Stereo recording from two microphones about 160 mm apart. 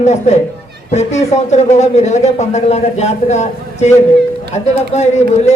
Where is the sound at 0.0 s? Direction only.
45° left (ahead or behind).